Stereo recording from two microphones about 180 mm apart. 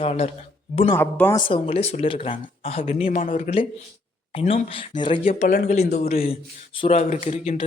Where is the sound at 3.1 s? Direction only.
50° left (ahead or behind).